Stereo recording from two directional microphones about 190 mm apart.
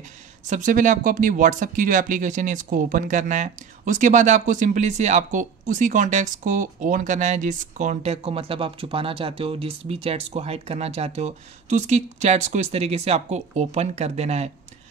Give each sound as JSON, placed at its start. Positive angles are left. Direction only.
{"t": 0.5, "sound": "speech", "side_deg": -40}